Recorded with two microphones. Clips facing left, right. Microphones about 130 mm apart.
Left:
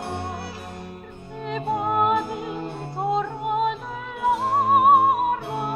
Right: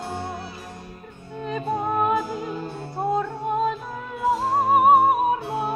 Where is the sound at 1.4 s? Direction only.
15° left (ahead or behind).